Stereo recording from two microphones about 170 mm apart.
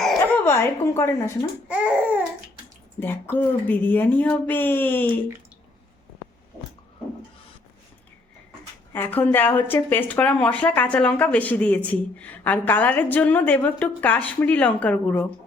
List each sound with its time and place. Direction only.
0.4 s speech: 15° left (ahead or behind)
1.6 s speech: 5° right (ahead or behind)
3.0 s speech: 10° left (ahead or behind)
8.9 s speech: 10° left (ahead or behind)